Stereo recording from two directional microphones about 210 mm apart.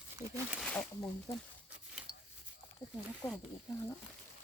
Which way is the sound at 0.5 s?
5° left (ahead or behind).